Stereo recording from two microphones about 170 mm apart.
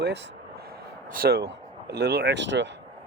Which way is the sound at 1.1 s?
70° right (ahead or behind).